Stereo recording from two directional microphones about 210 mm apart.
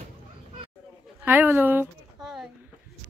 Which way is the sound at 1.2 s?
10° right (ahead or behind).